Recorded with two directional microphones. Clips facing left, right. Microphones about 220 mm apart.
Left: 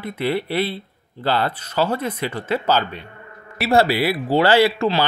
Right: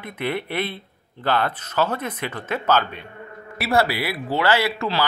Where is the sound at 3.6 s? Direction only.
25° left (ahead or behind).